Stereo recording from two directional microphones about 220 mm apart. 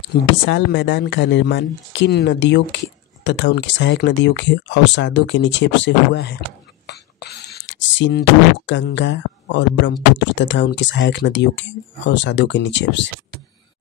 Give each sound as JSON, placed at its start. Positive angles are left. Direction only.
{"t": 0.5, "sound": "speech", "side_deg": 55}
{"t": 6.9, "sound": "whispering", "side_deg": 45}
{"t": 8.6, "sound": "speech", "side_deg": 55}